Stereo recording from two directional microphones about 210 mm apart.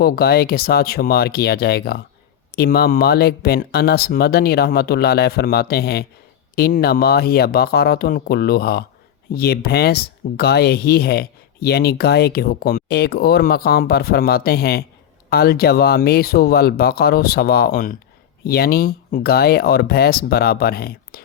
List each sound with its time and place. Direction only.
0.0 s speech: 45° left (ahead or behind)